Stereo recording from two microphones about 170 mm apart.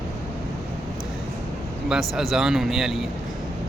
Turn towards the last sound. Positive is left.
turn(degrees=0)  # may be behind; listen again after turning